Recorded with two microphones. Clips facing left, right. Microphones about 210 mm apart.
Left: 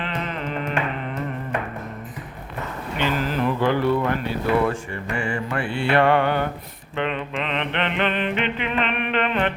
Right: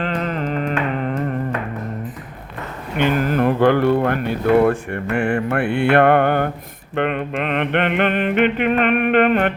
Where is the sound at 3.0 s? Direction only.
55° right (ahead or behind).